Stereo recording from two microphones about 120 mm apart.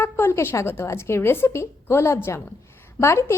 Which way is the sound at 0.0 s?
20° left (ahead or behind).